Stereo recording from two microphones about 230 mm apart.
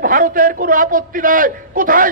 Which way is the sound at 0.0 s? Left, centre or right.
Right.